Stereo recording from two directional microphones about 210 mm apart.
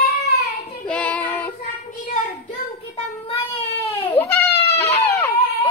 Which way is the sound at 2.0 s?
35° left (ahead or behind).